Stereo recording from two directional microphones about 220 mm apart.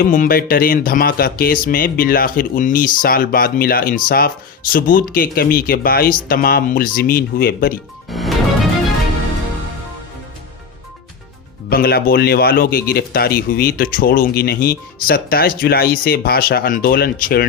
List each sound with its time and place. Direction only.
0.0 s speech: 40° left (ahead or behind)
8.1 s music: centre (ahead or behind)
11.7 s speech: 45° left (ahead or behind)